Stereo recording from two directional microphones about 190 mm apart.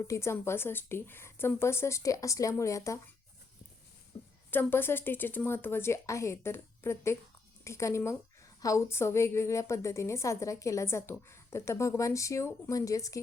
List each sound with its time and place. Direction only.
0.0 s a woman's voice: 15° left (ahead or behind)
4.5 s a woman's voice: 10° left (ahead or behind)